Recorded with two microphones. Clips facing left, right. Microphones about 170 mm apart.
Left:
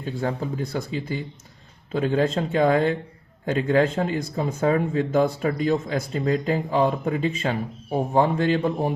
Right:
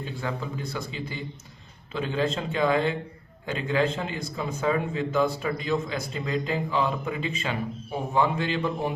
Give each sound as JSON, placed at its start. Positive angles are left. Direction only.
{"t": 0.0, "sound": "speech", "side_deg": 45}